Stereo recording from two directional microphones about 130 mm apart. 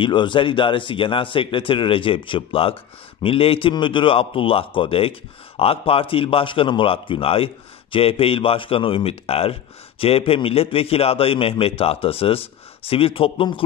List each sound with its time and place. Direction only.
0.0 s a man's voice: 40° left (ahead or behind)